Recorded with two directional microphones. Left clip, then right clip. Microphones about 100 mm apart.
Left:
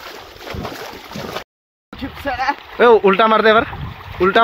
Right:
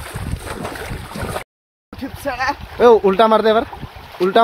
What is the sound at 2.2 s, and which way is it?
Speech, 75° right (ahead or behind).